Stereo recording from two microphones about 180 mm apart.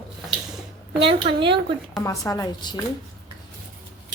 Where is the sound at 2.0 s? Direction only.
20° left (ahead or behind).